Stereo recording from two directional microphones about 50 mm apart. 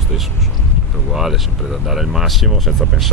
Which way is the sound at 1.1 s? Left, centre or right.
Centre.